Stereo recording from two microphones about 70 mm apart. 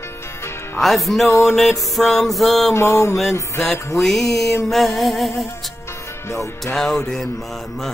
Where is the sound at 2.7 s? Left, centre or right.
Left.